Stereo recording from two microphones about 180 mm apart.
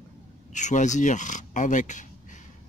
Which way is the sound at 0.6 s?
45° left (ahead or behind).